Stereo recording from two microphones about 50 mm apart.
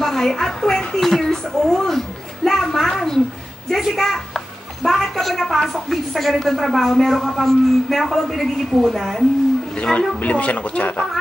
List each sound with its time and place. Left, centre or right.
0.0 s a sound: centre
3.9 s a woman's voice: centre
9.9 s a woman's voice: left